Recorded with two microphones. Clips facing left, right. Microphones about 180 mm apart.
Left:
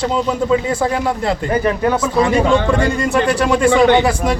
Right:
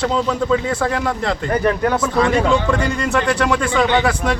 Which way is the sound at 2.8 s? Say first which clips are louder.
Left 3 dB; 25° left (ahead or behind).